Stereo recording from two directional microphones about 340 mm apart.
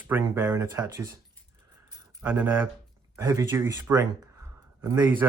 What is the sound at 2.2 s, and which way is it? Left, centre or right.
Speech, centre.